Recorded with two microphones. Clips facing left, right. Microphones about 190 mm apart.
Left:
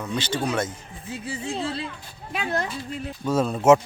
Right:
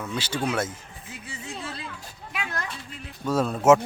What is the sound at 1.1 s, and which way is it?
A woman's voice, 30° left (ahead or behind).